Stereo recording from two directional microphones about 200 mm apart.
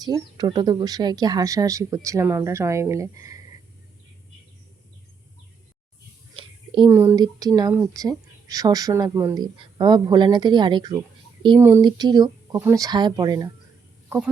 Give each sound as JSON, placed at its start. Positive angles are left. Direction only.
{"t": 0.0, "sound": "speech", "side_deg": -20}
{"t": 6.3, "sound": "speech", "side_deg": -25}